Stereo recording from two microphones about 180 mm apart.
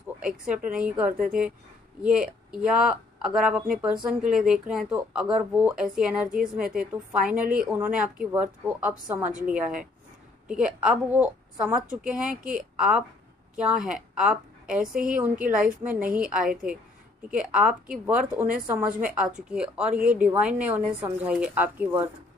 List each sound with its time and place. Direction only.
0.7 s a woman's voice: 5° right (ahead or behind)
12.3 s a woman's voice: 50° right (ahead or behind)
12.7 s a woman's voice: 5° right (ahead or behind)